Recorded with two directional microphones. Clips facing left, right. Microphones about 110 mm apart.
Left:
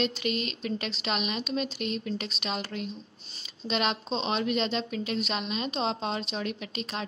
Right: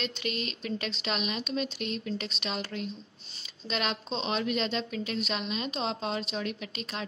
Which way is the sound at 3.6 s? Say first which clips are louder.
Left 3 dB; 20° left (ahead or behind).